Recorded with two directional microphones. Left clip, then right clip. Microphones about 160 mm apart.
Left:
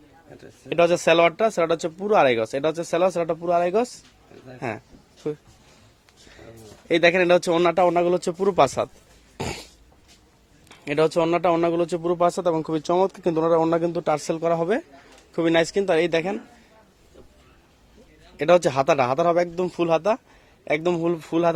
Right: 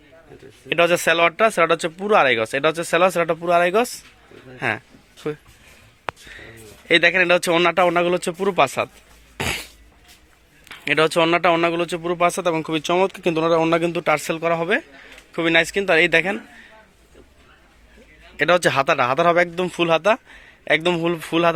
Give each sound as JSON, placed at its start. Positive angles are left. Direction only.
{"t": 0.7, "sound": "a man's voice", "side_deg": 0}
{"t": 9.4, "sound": "cough", "side_deg": 0}
{"t": 10.7, "sound": "speech", "side_deg": 5}
{"t": 11.5, "sound": "a man's voice", "side_deg": 20}
{"t": 14.0, "sound": "a man's voice", "side_deg": 10}
{"t": 18.3, "sound": "speech", "side_deg": 0}